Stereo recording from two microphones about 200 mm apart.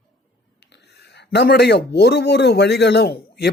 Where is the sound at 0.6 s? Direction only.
55° left (ahead or behind).